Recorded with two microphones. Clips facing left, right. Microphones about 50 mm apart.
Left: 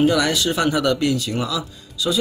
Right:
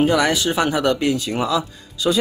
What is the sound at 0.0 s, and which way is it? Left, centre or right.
Speech, right.